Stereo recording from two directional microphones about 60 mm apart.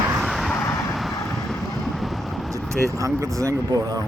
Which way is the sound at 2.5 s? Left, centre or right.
Right.